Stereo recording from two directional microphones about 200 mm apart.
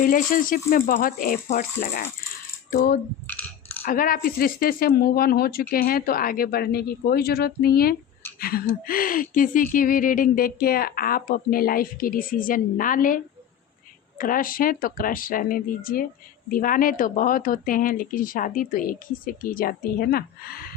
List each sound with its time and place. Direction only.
0.0 s speech: 45° left (ahead or behind)
3.2 s coin: 10° left (ahead or behind)
3.8 s speech: 45° left (ahead or behind)